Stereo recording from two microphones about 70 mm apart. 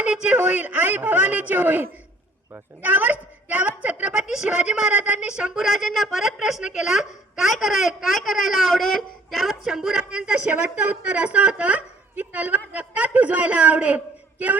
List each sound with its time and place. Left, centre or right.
0.0 s a woman's voice: centre
0.3 s a woman's voice: right